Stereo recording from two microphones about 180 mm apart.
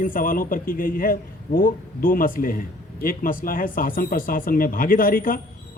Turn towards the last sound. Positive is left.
turn(degrees=50)  # may be behind; listen again after turning